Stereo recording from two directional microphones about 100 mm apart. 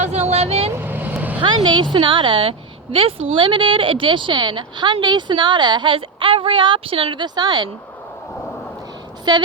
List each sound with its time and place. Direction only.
0.1 s vehicle: 90° right
0.7 s vehicle: 20° right (ahead or behind)
1.4 s a woman's voice: 55° right (ahead or behind)
9.3 s a woman's voice: 45° right (ahead or behind)